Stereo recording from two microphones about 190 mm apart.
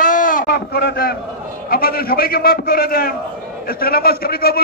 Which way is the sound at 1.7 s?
50° left (ahead or behind).